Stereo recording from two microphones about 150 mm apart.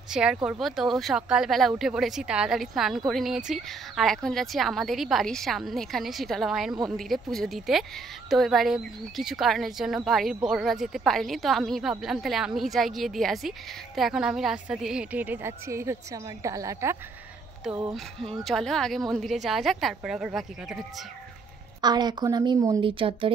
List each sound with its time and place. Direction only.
0.1 s a woman's voice: 5° right (ahead or behind)
17.9 s a woman's voice: centre (ahead or behind)
21.8 s a woman's voice: 30° right (ahead or behind)